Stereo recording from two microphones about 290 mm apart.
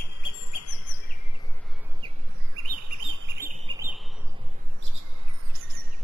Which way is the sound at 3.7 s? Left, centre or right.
Centre.